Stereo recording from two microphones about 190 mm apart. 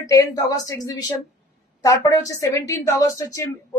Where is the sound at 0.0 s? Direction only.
20° left (ahead or behind).